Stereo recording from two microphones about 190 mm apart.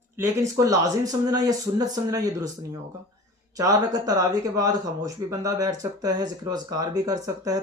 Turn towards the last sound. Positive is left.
turn(degrees=-20)  # may be behind; listen again after turning